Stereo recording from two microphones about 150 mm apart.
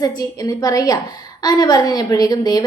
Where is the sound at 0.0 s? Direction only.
25° left (ahead or behind).